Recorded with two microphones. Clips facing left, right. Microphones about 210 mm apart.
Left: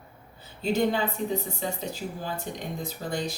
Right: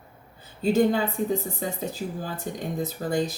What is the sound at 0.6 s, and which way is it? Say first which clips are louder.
Speech: right 4 dB; 45° right (ahead or behind).